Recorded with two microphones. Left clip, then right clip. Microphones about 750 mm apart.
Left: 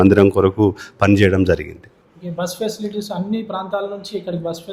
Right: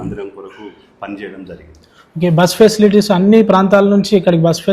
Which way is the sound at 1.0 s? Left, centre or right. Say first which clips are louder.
Left 13 dB; left.